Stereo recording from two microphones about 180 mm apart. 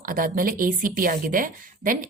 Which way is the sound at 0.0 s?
50° right (ahead or behind).